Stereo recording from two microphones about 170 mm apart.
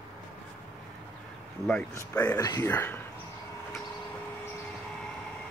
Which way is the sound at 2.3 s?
20° left (ahead or behind).